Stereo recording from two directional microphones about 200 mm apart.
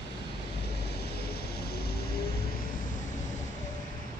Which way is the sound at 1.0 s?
55° left (ahead or behind).